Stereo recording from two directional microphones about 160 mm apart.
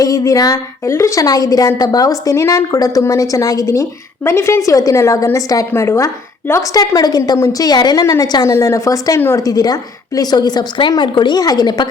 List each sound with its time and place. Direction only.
0.0 s a woman's voice: 20° left (ahead or behind)